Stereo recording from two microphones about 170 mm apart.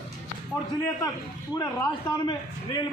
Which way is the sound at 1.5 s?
25° left (ahead or behind).